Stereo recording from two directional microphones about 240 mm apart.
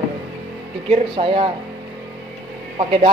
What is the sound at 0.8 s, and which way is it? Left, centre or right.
Speech, right.